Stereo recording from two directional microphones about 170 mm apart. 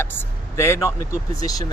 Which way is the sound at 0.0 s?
10° left (ahead or behind).